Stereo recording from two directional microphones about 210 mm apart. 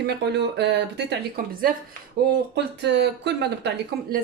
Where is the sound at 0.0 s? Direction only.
50° right (ahead or behind).